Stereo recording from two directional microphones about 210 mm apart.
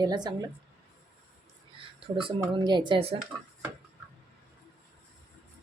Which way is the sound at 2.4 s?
20° right (ahead or behind).